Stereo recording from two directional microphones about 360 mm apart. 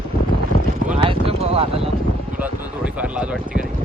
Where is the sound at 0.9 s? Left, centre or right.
Centre.